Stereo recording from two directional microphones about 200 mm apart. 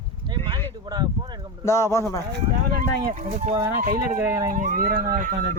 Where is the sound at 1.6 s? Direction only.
15° left (ahead or behind).